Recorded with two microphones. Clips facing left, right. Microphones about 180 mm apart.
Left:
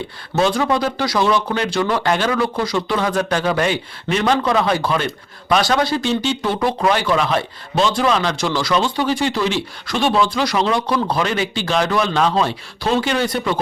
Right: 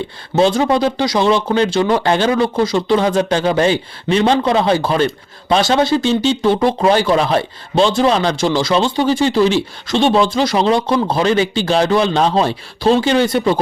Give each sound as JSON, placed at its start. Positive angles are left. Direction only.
{"t": 0.3, "sound": "speech", "side_deg": -25}